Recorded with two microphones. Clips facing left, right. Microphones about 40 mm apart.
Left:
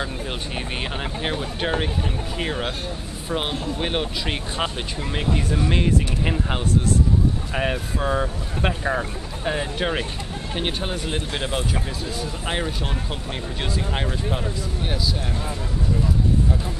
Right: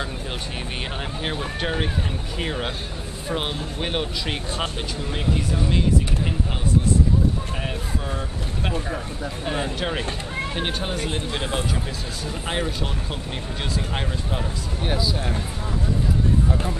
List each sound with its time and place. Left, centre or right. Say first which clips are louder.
1.6 s speech: left 2 dB; centre
5.6 s speech: left 1 dB; left
7.5 s speech: left 5 dB; left
9.4 s speech: left 2 dB; centre